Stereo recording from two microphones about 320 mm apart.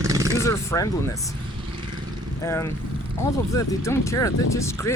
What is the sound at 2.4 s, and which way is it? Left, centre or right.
Speech, centre.